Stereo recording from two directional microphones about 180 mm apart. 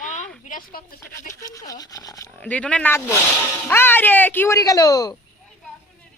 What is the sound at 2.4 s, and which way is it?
Speech, 5° left (ahead or behind).